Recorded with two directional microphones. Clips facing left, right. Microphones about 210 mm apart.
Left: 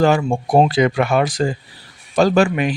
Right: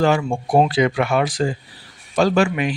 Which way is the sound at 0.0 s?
40° left (ahead or behind).